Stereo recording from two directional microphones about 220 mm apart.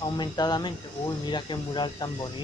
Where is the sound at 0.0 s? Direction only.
20° left (ahead or behind).